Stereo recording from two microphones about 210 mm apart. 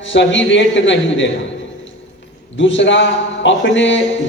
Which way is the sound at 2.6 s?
60° left (ahead or behind).